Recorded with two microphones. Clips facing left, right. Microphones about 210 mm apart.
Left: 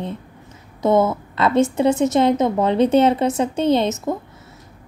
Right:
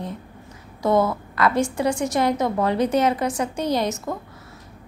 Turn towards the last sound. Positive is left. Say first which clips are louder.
# left 5 dB
turn(degrees=20)  # may be behind; listen again after turning